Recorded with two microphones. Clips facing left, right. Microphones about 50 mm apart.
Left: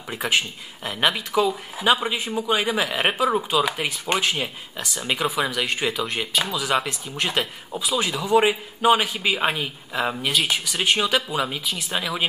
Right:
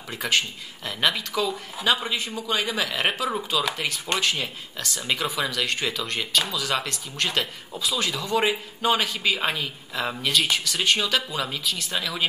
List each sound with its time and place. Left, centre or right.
0.1 s speech: centre